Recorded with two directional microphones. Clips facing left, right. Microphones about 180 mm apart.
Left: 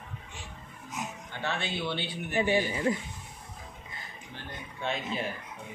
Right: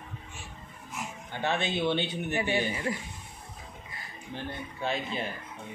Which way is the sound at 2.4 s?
25° left (ahead or behind).